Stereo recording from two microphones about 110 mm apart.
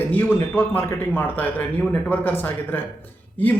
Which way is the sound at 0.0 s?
15° left (ahead or behind).